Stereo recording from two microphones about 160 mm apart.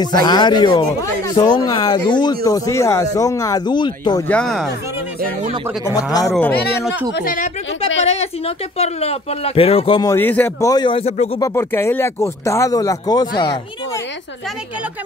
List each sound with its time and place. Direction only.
0.0 s speech: 25° left (ahead or behind)
4.3 s speech: 5° left (ahead or behind)
6.3 s speech: 5° left (ahead or behind)
7.2 s speech: 60° left (ahead or behind)
7.8 s speech: 40° left (ahead or behind)
10.0 s speech: 15° left (ahead or behind); by 11.2 s 40° left (ahead or behind)
11.3 s speech: 20° left (ahead or behind)